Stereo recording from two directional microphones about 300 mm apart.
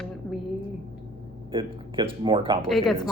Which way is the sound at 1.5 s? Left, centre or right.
Centre.